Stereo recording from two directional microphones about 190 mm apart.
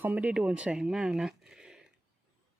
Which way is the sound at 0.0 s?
10° right (ahead or behind).